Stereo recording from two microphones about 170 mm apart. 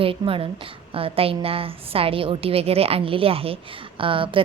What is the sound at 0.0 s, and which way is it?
A woman's voice, 30° right (ahead or behind).